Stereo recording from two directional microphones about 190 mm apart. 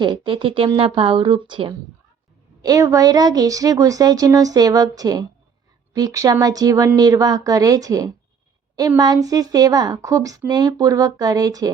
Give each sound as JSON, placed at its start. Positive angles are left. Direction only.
{"t": 0.0, "sound": "speech", "side_deg": -25}